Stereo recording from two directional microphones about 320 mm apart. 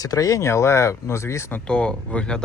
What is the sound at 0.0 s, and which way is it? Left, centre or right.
Speech, centre.